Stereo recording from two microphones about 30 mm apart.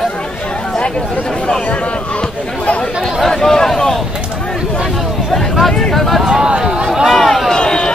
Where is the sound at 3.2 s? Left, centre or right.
Centre.